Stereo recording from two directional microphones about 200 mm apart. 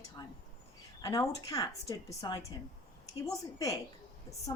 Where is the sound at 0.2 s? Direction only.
20° left (ahead or behind).